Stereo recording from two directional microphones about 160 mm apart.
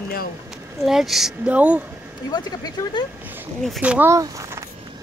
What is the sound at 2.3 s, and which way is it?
Speech, 30° left (ahead or behind).